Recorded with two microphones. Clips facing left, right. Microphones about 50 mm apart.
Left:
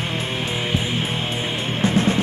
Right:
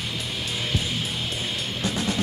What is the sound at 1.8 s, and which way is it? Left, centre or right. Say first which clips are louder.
Music: left 8 dB; left.